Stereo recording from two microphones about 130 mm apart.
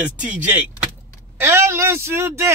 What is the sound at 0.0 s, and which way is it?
Speech, 10° right (ahead or behind).